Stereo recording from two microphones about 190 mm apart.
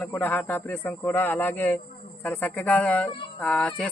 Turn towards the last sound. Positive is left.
turn(degrees=5)  # may be behind; listen again after turning